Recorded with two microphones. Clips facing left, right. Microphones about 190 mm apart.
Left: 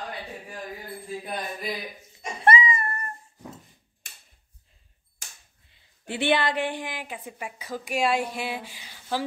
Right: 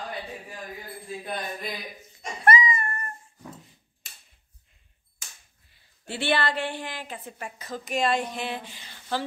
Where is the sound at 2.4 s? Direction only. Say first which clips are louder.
Left 1 dB; 30° left (ahead or behind).